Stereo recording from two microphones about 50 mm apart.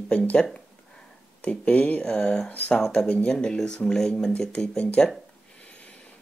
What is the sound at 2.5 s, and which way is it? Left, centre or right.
Speech, left.